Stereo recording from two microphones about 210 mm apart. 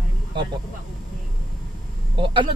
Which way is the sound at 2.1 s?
25° right (ahead or behind).